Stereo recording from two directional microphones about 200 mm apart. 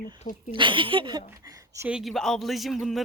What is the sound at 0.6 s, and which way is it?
Speech, 25° right (ahead or behind).